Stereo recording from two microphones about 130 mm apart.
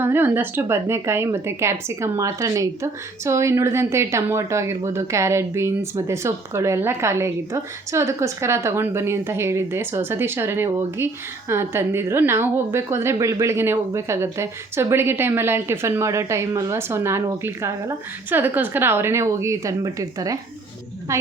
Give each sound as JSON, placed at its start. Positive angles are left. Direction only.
{"t": 0.0, "sound": "speech", "side_deg": -15}